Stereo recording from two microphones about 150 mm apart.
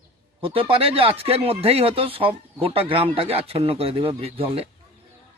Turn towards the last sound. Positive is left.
turn(degrees=-40)  # may be behind; listen again after turning